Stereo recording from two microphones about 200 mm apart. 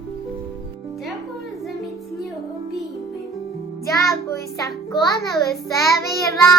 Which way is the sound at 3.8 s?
50° left (ahead or behind).